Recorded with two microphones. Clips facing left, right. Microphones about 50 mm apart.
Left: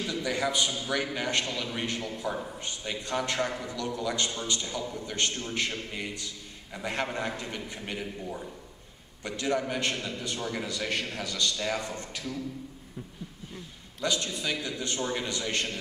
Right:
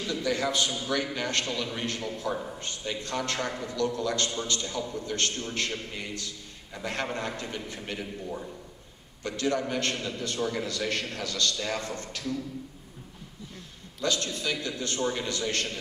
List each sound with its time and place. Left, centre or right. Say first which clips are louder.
0.0 s a man's voice: right 1 dB; centre
9.2 s a man's voice: right 1 dB; centre
14.0 s a man's voice: right 1 dB; left
15.0 s a man's voice: right 3 dB; centre
15.2 s a man's voice: right 1 dB; left